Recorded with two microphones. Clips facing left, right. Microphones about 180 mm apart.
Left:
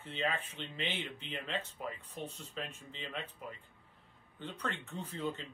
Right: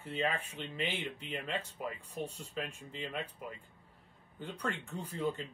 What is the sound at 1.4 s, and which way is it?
Speech, 10° right (ahead or behind).